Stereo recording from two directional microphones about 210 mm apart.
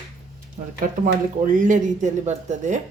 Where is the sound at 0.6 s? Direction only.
35° right (ahead or behind).